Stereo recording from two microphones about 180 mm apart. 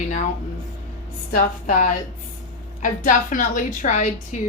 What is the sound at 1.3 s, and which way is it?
A woman's voice, 45° left (ahead or behind).